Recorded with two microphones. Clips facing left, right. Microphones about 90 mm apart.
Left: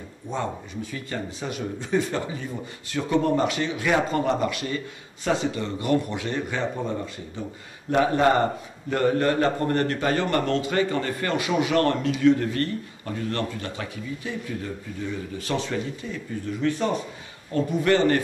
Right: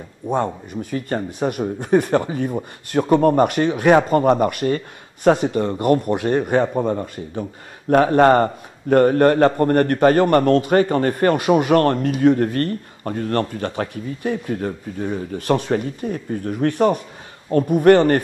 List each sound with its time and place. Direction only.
0.3 s a man's voice: 50° right (ahead or behind)